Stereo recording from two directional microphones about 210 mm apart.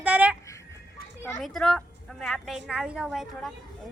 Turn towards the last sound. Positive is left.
turn(degrees=0)  # may be behind; listen again after turning